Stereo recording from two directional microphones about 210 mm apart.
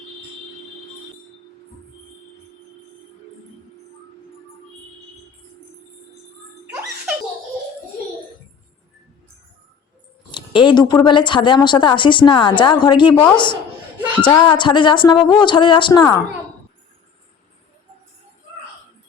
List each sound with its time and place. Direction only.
10.3 s a woman's voice: 20° left (ahead or behind)